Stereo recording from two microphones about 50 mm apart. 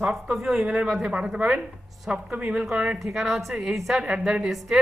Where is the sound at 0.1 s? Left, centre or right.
Centre.